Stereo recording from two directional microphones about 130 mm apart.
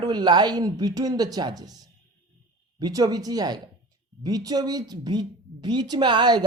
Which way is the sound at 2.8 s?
30° right (ahead or behind).